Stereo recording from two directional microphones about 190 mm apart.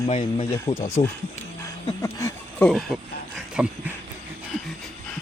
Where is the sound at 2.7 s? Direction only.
Centre (ahead or behind).